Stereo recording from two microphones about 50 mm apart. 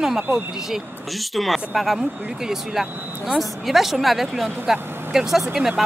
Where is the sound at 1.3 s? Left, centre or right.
Centre.